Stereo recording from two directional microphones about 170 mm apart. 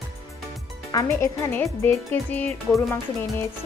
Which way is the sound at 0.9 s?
20° left (ahead or behind).